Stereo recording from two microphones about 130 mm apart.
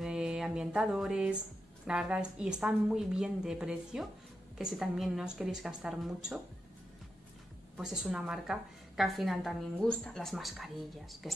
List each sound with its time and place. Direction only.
0.0 s music: 5° right (ahead or behind)
1.9 s a woman's voice: 5° right (ahead or behind)
7.7 s a woman's voice: 5° right (ahead or behind)